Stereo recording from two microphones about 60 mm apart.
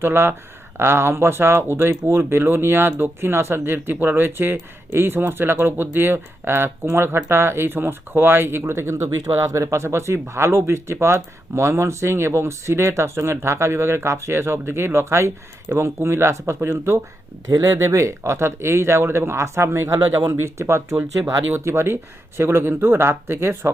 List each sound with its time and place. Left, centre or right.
0.0 s speech: right
17.5 s speech: right